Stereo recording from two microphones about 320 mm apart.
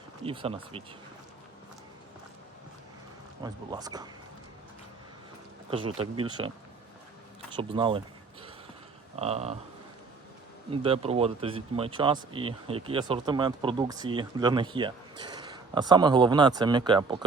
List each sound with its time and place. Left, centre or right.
0.3 s speech: centre
3.4 s speech: centre
5.7 s speech: centre
7.5 s speech: centre
10.7 s speech: centre